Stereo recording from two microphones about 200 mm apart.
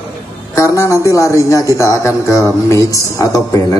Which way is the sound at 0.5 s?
15° left (ahead or behind).